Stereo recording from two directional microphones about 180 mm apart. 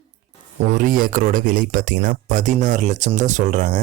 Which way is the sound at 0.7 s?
45° right (ahead or behind).